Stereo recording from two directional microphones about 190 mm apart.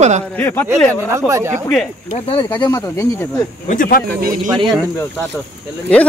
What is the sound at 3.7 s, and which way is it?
Speech, 50° left (ahead or behind).